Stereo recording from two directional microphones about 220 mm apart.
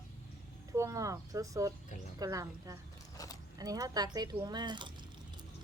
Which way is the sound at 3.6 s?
15° right (ahead or behind).